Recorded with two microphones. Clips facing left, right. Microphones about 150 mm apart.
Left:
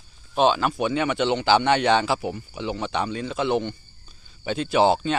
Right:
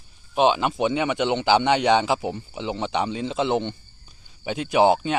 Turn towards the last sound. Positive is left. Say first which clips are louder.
# right 1 dB
turn(degrees=-15)  # may be behind; listen again after turning